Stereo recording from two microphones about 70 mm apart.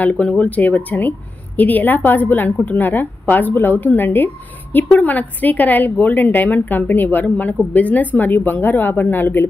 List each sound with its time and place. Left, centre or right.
0.0 s a woman's voice: centre